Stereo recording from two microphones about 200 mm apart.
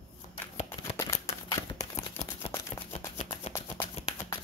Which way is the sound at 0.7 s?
15° left (ahead or behind).